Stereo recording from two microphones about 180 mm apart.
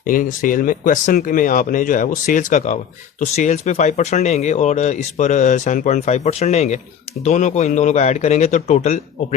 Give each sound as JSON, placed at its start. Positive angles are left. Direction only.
{"t": 0.1, "sound": "speech", "side_deg": 50}